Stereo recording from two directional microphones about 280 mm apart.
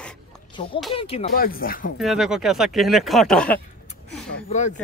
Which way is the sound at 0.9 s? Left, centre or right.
Centre.